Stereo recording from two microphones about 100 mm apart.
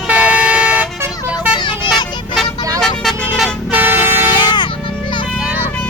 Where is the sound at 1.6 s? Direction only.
50° left (ahead or behind).